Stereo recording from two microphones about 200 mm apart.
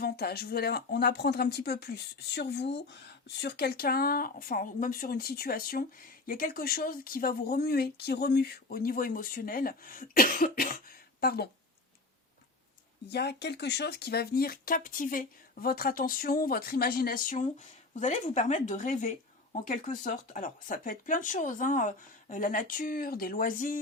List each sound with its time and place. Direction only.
0.0 s speech: 50° left (ahead or behind)
13.1 s speech: 55° left (ahead or behind)